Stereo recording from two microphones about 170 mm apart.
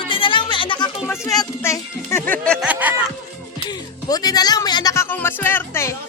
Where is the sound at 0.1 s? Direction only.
30° left (ahead or behind).